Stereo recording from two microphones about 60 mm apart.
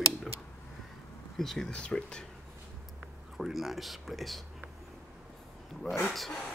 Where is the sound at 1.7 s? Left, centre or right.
Centre.